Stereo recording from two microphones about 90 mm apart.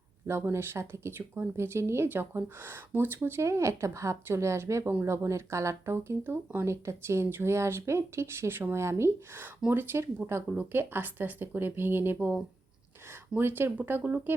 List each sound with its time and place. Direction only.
0.3 s speech: 30° right (ahead or behind)
10.5 s speech: 20° right (ahead or behind)
13.3 s speech: 25° right (ahead or behind)